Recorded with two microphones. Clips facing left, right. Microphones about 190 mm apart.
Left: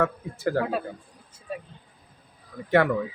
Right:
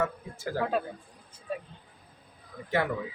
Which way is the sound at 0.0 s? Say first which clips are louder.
Left 6 dB; 60° left (ahead or behind).